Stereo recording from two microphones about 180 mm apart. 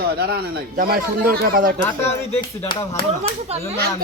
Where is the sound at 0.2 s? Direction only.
60° right (ahead or behind).